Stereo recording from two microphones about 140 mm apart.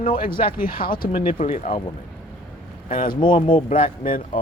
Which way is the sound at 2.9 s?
70° left (ahead or behind).